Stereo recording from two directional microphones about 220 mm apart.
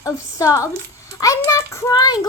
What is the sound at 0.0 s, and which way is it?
A child's voice, 15° left (ahead or behind).